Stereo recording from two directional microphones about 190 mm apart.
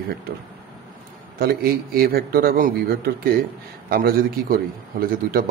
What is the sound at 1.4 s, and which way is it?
Speech, 55° right (ahead or behind).